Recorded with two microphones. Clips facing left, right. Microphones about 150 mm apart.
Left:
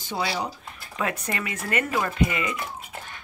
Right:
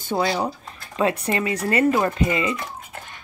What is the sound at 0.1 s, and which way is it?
Speech, 50° right (ahead or behind).